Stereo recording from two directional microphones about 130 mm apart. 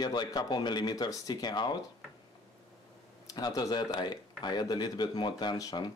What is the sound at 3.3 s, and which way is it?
Speech, 30° left (ahead or behind).